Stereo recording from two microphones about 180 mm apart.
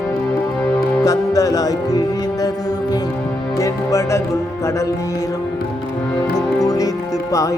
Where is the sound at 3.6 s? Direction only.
15° left (ahead or behind).